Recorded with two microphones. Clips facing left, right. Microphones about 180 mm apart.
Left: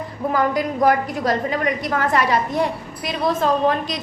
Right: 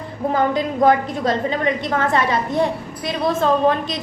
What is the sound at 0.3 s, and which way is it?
A woman's voice, 25° right (ahead or behind).